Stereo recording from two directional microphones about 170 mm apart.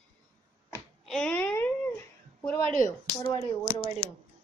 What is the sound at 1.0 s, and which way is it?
Speech, 5° left (ahead or behind).